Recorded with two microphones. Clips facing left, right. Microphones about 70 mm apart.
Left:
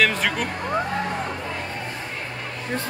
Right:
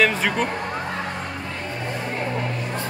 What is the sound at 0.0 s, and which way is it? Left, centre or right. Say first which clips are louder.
Speech: right 2 dB; centre.